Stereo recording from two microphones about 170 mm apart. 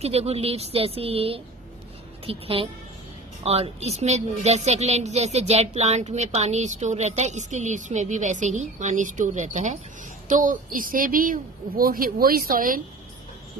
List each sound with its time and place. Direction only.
0.0 s a woman's voice: 35° right (ahead or behind); by 12.8 s 55° right (ahead or behind)